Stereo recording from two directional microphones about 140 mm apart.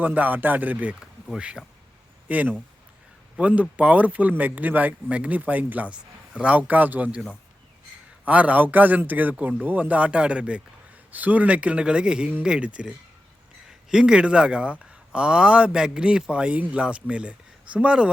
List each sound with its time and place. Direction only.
0.0 s speech: 10° right (ahead or behind)
8.3 s speech: 10° right (ahead or behind)